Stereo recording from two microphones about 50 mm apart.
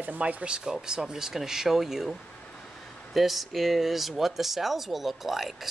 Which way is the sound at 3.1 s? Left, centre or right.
Centre.